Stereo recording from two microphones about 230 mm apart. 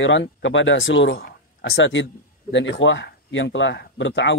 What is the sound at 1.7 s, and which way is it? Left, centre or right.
A man's voice, left.